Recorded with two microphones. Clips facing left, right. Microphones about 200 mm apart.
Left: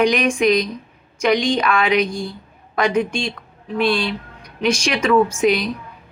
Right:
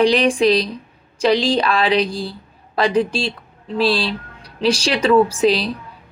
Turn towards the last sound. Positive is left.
turn(degrees=-30)  # may be behind; listen again after turning